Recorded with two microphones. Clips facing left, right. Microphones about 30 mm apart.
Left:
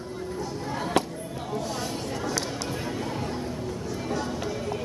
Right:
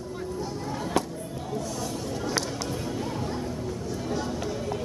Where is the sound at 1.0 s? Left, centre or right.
Left.